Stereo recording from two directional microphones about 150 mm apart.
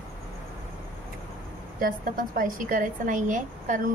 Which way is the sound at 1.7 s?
65° right (ahead or behind).